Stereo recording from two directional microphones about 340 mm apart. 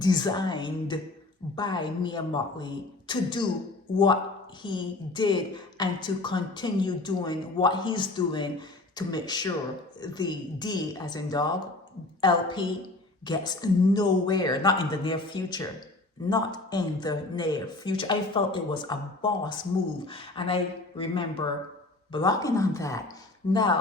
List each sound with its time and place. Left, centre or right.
0.0 s a woman's voice: centre